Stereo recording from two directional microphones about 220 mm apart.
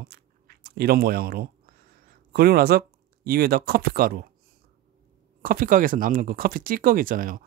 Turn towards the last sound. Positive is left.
turn(degrees=-40)  # may be behind; listen again after turning